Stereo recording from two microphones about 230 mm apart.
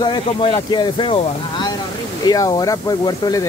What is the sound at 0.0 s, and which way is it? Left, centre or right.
Speech, left.